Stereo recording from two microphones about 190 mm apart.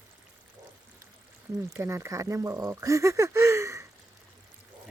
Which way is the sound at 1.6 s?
15° right (ahead or behind).